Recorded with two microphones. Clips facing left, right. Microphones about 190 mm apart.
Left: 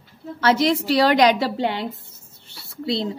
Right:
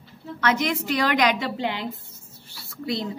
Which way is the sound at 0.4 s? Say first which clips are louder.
Left 5 dB; 30° left (ahead or behind).